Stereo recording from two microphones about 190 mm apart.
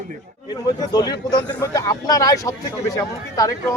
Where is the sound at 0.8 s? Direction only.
20° left (ahead or behind).